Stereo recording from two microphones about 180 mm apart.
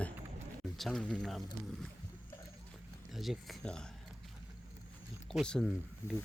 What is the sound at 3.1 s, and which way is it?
Speech, centre (ahead or behind).